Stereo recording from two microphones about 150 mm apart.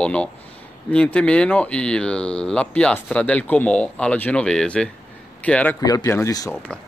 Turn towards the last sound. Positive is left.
turn(degrees=20)  # may be behind; listen again after turning